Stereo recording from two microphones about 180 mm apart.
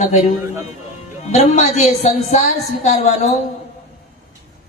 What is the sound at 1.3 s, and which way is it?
A man's voice, 40° left (ahead or behind).